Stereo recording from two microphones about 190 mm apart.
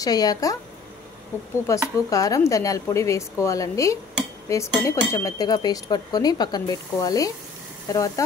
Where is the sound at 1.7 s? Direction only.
15° left (ahead or behind).